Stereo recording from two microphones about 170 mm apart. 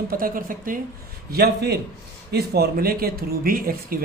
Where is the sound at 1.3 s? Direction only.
70° right (ahead or behind).